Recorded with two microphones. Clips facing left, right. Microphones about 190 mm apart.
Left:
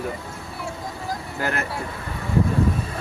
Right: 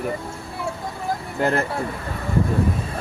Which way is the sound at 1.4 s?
30° right (ahead or behind).